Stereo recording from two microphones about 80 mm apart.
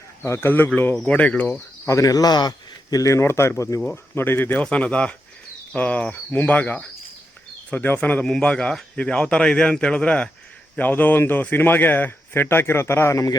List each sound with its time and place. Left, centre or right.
0.3 s a man's voice: left
1.9 s speech: left
2.5 s speech: left
4.6 s a man's voice: centre; by 13.3 s left